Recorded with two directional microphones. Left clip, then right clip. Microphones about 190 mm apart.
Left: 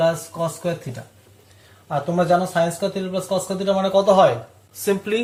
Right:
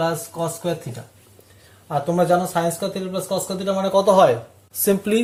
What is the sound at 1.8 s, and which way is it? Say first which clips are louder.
Speech: right 1 dB; 45° right (ahead or behind).